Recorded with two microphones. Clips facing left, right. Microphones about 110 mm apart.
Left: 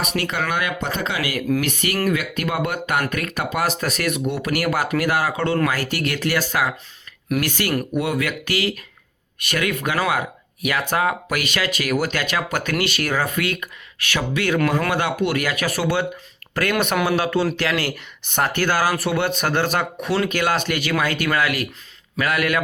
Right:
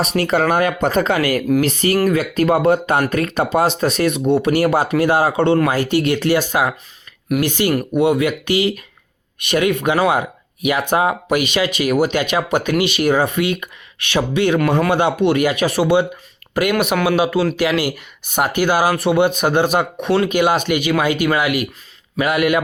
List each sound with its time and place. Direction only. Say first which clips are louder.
0.0 s speech: right 7 dB; 35° right (ahead or behind)
1.6 s speech: right 6 dB; 30° right (ahead or behind)